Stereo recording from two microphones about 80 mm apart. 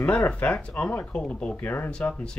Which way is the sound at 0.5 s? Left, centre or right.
Centre.